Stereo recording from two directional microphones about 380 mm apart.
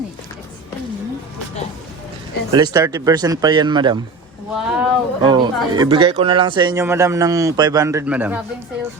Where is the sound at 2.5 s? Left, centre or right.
Centre.